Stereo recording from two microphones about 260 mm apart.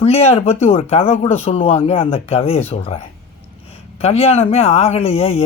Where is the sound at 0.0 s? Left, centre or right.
Left.